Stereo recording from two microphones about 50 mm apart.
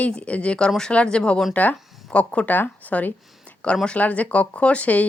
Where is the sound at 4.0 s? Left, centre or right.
Left.